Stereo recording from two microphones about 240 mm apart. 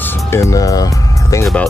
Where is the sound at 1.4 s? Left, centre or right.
Centre.